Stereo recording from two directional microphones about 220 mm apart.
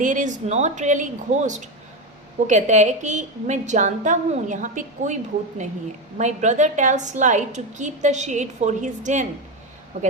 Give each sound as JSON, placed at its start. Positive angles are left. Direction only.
{"t": 0.0, "sound": "a woman's voice", "side_deg": -35}
{"t": 6.1, "sound": "a woman's voice", "side_deg": -30}